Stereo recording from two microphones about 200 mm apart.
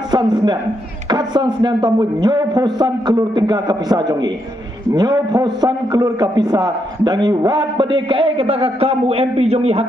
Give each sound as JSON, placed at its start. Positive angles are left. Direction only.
{"t": 0.1, "sound": "a man's voice", "side_deg": -20}